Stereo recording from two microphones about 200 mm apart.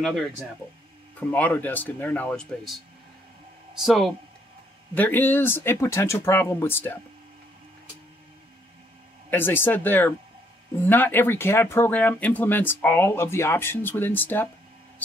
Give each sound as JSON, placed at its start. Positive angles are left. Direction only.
{"t": 1.3, "sound": "speech", "side_deg": 10}
{"t": 9.3, "sound": "speech", "side_deg": 10}